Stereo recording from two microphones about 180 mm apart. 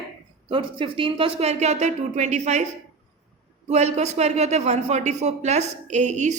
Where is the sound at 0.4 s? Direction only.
30° right (ahead or behind).